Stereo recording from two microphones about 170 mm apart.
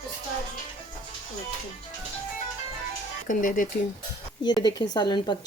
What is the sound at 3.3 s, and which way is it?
Speech, 50° left (ahead or behind).